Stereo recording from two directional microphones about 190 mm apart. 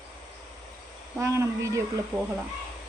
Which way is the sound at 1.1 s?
15° right (ahead or behind).